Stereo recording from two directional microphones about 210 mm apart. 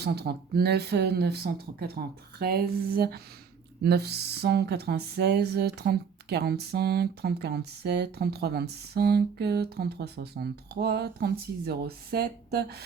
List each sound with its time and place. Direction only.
0.0 s speech: 50° right (ahead or behind)